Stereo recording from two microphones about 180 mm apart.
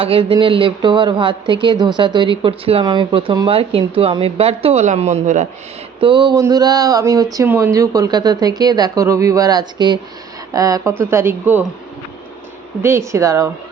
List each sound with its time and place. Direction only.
0.0 s speech: 30° right (ahead or behind)
6.0 s speech: 25° right (ahead or behind)
12.8 s speech: 15° right (ahead or behind)